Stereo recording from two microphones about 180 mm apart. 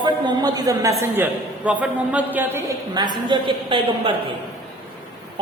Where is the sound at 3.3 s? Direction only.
30° right (ahead or behind).